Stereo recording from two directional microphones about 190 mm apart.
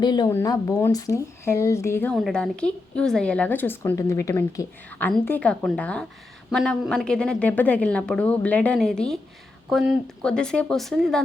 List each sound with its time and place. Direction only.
0.0 s a woman's voice: 20° left (ahead or behind); by 11.2 s centre (ahead or behind)